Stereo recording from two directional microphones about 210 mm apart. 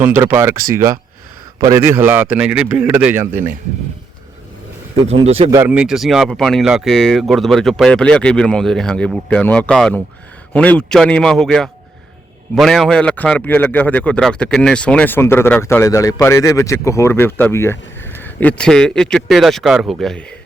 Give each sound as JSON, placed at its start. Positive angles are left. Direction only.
{"t": 0.0, "sound": "a man's voice", "side_deg": -10}
{"t": 5.0, "sound": "speech", "side_deg": -30}
{"t": 5.5, "sound": "a man's voice", "side_deg": -10}